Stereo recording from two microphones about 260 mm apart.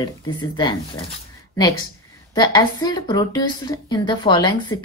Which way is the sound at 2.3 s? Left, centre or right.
Centre.